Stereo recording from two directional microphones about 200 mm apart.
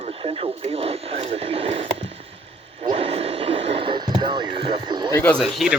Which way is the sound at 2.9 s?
30° right (ahead or behind).